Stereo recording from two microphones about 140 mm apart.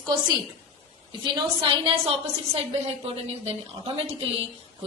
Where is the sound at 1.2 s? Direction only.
35° right (ahead or behind).